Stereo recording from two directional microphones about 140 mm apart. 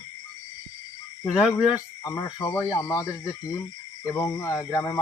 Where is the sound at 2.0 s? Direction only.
20° left (ahead or behind).